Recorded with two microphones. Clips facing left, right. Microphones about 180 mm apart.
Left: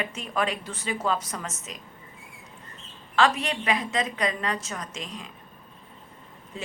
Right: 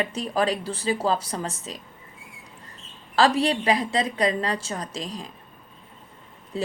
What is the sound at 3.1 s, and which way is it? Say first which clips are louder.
A woman's voice: right 4 dB; 35° right (ahead or behind).